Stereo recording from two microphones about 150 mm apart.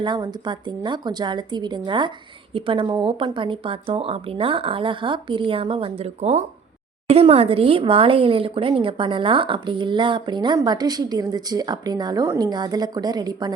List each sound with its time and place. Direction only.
0.0 s a woman's voice: 30° right (ahead or behind)